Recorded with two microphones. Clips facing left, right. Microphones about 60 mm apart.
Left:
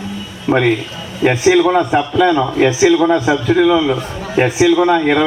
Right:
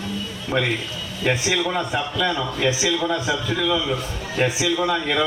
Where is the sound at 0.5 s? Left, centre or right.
Left.